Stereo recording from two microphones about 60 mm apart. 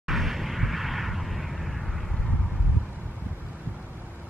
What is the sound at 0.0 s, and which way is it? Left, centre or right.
Explosion, centre.